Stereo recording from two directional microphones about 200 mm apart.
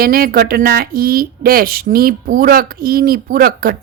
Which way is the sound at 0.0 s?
45° right (ahead or behind).